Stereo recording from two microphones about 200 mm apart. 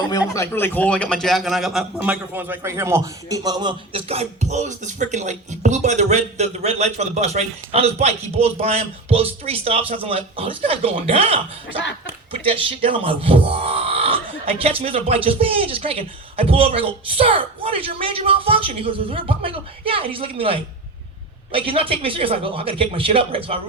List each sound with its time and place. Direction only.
0.1 s a man's voice: 15° left (ahead or behind); by 11.8 s 30° right (ahead or behind)
12.8 s speech: 25° right (ahead or behind)